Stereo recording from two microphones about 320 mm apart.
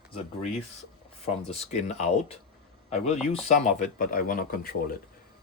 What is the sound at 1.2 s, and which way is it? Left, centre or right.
Speech, centre.